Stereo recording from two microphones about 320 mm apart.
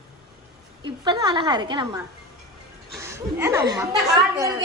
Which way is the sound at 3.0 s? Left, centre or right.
Centre.